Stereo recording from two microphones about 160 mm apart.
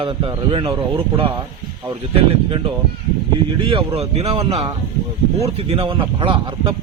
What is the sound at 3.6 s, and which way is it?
A man's voice, 35° right (ahead or behind).